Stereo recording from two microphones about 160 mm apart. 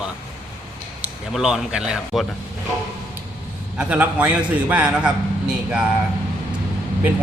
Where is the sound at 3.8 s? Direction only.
10° right (ahead or behind).